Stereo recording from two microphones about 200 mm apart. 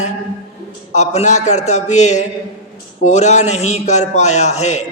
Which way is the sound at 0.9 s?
35° left (ahead or behind).